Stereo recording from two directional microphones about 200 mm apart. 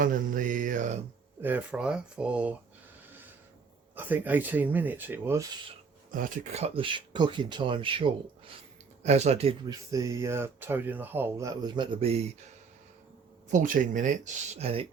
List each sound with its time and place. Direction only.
0.0 s speech: 40° right (ahead or behind)
1.4 s speech: 10° right (ahead or behind)
3.9 s speech: 10° right (ahead or behind)
6.1 s speech: 40° right (ahead or behind)
9.9 s speech: 15° right (ahead or behind)
13.5 s speech: 40° right (ahead or behind)